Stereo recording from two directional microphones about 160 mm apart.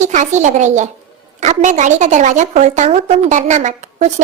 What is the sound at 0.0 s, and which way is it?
A woman's voice, 50° right (ahead or behind).